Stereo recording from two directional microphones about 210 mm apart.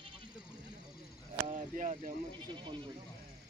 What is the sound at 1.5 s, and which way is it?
Speech, 35° right (ahead or behind).